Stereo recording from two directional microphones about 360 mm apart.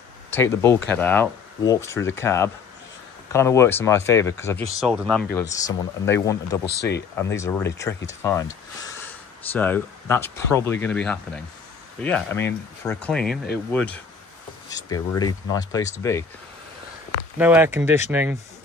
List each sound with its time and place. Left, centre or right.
0.3 s speech: centre
5.3 s speech: centre
6.6 s speech: left
7.2 s speech: centre
9.5 s speech: centre
14.9 s speech: centre
17.4 s speech: centre